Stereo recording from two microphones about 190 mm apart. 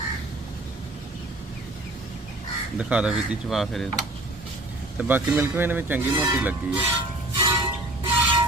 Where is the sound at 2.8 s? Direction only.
5° right (ahead or behind).